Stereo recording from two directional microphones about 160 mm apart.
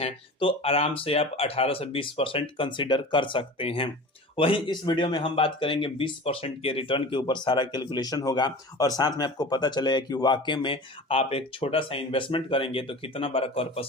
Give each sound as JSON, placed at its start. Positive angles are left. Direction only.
{"t": 0.0, "sound": "speech", "side_deg": 35}